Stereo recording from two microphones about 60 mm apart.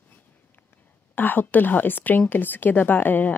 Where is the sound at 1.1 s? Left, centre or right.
Left.